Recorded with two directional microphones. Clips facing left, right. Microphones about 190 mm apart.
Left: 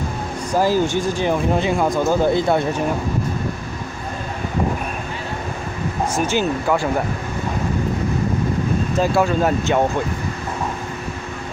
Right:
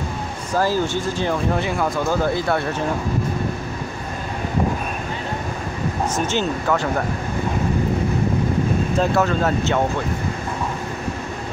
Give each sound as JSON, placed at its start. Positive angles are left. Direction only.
{"t": 0.6, "sound": "speech", "side_deg": 15}
{"t": 6.1, "sound": "speech", "side_deg": 10}
{"t": 9.0, "sound": "speech", "side_deg": 10}